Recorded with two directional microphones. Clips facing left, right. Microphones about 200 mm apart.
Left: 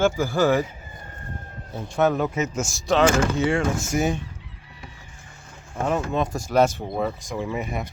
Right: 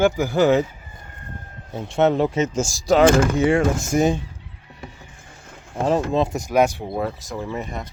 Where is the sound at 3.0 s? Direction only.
15° right (ahead or behind).